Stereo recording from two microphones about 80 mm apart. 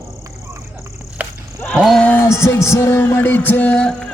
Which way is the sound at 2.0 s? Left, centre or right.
Left.